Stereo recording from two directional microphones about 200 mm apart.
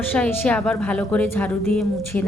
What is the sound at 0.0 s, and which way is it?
A woman's voice, 10° left (ahead or behind).